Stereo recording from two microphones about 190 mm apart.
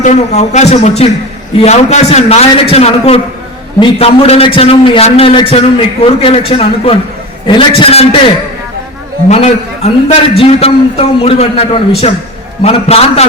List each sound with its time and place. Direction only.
0.0 s a man's voice: 35° left (ahead or behind)
9.3 s a man's voice: 35° left (ahead or behind)